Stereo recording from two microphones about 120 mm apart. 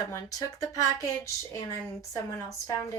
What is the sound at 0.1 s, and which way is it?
Speech, 30° left (ahead or behind).